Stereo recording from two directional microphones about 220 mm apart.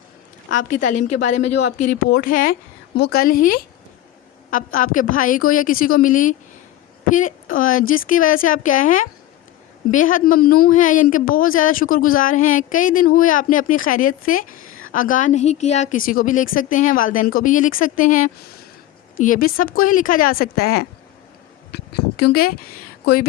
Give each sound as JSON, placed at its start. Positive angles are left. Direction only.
{"t": 0.5, "sound": "speech", "side_deg": 35}
{"t": 1.5, "sound": "speech", "side_deg": 90}
{"t": 2.0, "sound": "speech", "side_deg": 40}